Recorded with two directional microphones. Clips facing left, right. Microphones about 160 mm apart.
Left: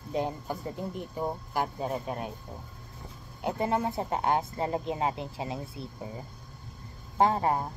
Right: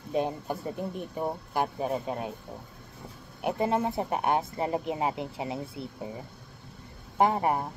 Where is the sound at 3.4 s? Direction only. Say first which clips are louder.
Right 2 dB; 20° right (ahead or behind).